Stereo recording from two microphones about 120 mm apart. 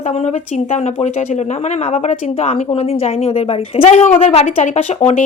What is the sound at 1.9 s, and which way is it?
A woman's voice, 80° left.